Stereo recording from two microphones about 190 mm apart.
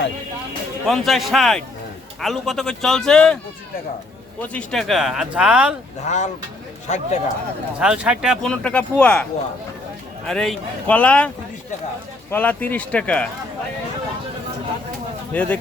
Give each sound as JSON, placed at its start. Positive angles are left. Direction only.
{"t": 0.9, "sound": "speech", "side_deg": 0}
{"t": 4.5, "sound": "speech", "side_deg": 0}
{"t": 6.1, "sound": "speech", "side_deg": 35}
{"t": 7.8, "sound": "speech", "side_deg": -5}
{"t": 10.2, "sound": "speech", "side_deg": 5}
{"t": 12.3, "sound": "speech", "side_deg": 10}
{"t": 15.3, "sound": "speech", "side_deg": 10}